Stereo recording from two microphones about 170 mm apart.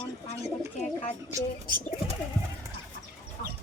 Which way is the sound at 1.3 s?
25° right (ahead or behind).